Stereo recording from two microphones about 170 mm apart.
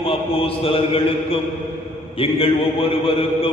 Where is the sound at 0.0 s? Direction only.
30° left (ahead or behind).